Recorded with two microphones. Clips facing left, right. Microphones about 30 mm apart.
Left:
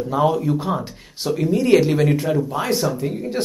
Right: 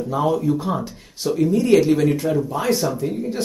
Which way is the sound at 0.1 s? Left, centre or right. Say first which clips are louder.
Left 1 dB; centre.